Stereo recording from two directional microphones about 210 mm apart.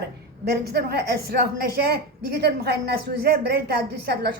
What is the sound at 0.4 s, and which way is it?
A woman's voice, 50° right (ahead or behind).